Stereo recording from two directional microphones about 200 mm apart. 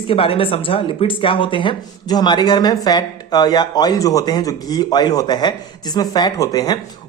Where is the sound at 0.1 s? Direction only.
25° left (ahead or behind).